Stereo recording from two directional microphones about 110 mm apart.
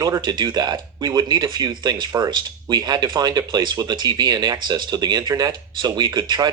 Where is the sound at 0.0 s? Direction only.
40° right (ahead or behind).